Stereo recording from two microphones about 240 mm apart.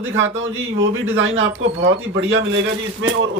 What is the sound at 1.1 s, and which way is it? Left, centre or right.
A man's voice, right.